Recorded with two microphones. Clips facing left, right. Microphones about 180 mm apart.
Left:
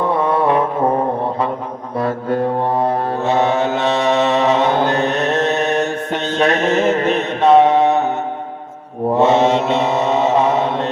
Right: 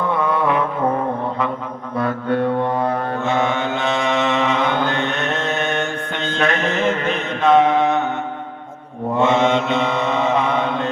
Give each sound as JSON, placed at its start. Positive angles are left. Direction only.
{"t": 0.1, "sound": "mantra", "side_deg": 35}
{"t": 2.0, "sound": "mantra", "side_deg": 35}
{"t": 9.1, "sound": "mantra", "side_deg": 35}